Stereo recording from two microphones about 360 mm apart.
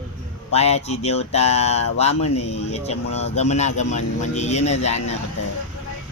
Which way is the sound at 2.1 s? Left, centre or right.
Left.